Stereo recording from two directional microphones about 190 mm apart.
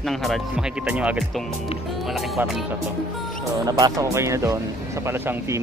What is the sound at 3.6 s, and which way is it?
Speech, 20° right (ahead or behind).